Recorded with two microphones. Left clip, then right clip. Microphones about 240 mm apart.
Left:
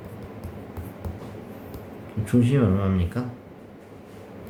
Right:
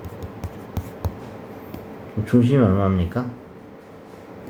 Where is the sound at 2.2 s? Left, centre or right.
Centre.